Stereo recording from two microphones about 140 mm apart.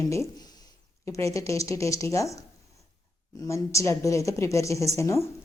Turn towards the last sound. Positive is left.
turn(degrees=20)  # may be behind; listen again after turning